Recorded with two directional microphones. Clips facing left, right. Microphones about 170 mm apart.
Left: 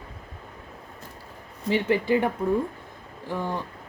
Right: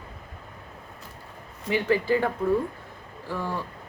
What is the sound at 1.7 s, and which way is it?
A woman's voice, 20° left (ahead or behind).